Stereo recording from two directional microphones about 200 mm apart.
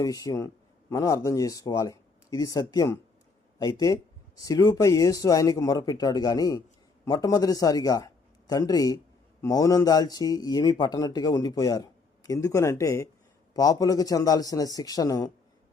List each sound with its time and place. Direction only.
0.0 s a man's voice: 20° left (ahead or behind)